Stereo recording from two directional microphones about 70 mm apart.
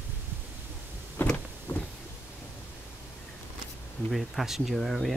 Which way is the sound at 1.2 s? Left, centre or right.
Left.